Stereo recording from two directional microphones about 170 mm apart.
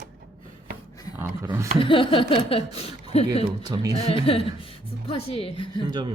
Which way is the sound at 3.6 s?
20° right (ahead or behind).